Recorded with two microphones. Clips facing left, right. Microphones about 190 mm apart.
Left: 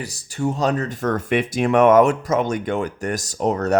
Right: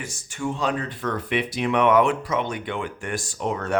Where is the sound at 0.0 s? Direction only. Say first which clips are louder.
Left 5 dB; 35° left (ahead or behind).